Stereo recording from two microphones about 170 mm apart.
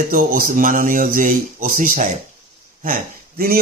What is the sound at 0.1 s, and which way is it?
Speech, 55° right (ahead or behind).